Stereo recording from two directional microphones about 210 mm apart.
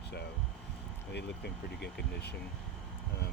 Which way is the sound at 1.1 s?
55° left (ahead or behind).